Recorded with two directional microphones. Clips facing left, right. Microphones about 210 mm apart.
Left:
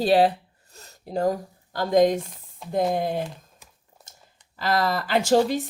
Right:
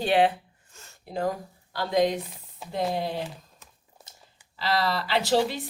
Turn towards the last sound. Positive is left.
turn(degrees=45)  # may be behind; listen again after turning